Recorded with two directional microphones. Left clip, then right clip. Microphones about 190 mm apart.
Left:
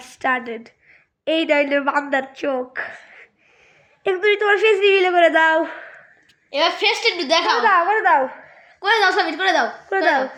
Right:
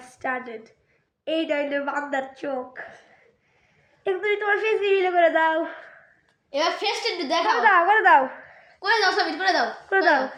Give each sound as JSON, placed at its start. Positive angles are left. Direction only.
{"t": 0.0, "sound": "a woman's voice", "side_deg": 40}
{"t": 4.0, "sound": "a man's voice", "side_deg": 50}
{"t": 6.5, "sound": "a woman's voice", "side_deg": 35}
{"t": 7.6, "sound": "a woman's voice", "side_deg": 15}
{"t": 8.8, "sound": "a man's voice", "side_deg": 45}
{"t": 9.9, "sound": "speech", "side_deg": 25}